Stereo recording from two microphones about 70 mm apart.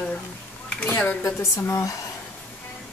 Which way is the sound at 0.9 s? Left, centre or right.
Left.